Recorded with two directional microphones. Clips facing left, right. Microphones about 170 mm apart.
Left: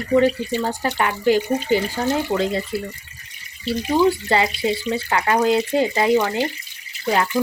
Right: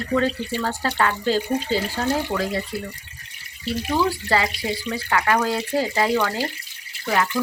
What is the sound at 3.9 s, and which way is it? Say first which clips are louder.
Speech: left 4 dB; 20° left (ahead or behind).